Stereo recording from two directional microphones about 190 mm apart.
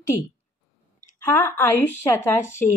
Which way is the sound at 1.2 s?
10° left (ahead or behind).